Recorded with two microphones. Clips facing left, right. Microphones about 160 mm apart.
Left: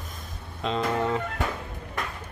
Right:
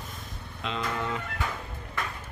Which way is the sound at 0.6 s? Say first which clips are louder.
Left 6 dB; 40° left (ahead or behind).